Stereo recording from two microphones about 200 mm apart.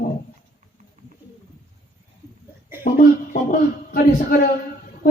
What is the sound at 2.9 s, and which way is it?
A man's voice, 45° left (ahead or behind).